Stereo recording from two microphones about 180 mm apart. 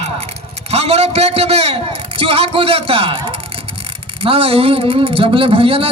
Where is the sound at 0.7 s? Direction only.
35° right (ahead or behind).